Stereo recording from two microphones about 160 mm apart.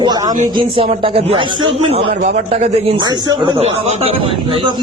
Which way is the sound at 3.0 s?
30° right (ahead or behind).